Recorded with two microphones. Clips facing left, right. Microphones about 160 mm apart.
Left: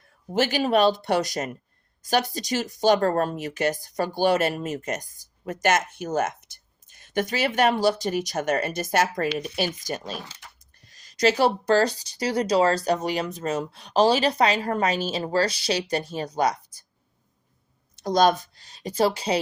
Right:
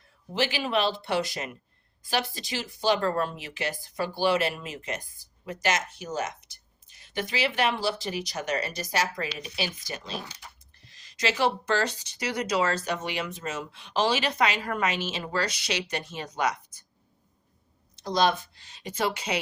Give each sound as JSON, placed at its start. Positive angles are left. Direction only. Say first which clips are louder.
{"t": 0.3, "sound": "speech", "louder": "left 6 dB", "side_deg": 45}
{"t": 17.9, "sound": "speech", "louder": "left 5 dB", "side_deg": 45}